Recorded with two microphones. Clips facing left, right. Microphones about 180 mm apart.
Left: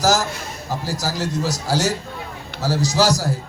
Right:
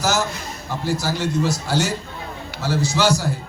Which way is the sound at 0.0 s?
35° left (ahead or behind).